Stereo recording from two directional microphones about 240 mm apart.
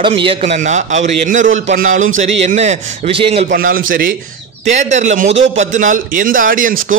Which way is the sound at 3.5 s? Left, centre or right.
Right.